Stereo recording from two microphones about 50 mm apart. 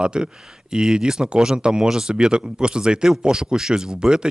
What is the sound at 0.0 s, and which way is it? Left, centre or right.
Speech, centre.